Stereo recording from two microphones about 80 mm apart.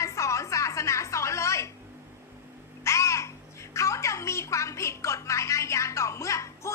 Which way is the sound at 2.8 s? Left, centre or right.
Left.